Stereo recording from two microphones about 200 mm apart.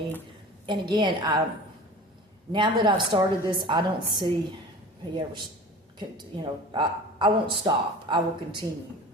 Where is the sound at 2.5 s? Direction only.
25° right (ahead or behind).